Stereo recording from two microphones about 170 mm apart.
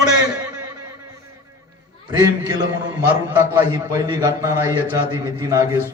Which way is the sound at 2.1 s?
25° right (ahead or behind).